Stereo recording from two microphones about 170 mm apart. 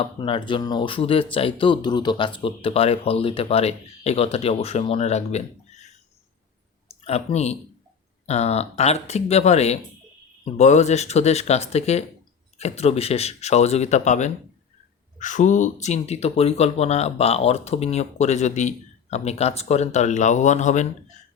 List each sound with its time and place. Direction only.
0.0 s speech: 30° left (ahead or behind); by 21.2 s 45° left (ahead or behind)